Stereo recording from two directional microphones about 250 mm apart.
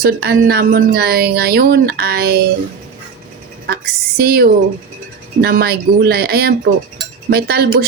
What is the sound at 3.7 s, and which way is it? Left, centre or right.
Speech, right.